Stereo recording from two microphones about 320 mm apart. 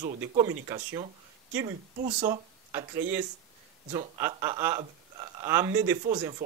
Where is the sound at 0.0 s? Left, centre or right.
Right.